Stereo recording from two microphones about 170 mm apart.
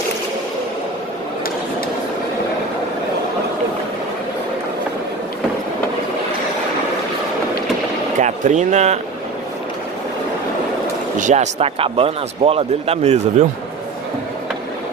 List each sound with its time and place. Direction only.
8.2 s speech: 45° right (ahead or behind)
11.1 s speech: 45° right (ahead or behind)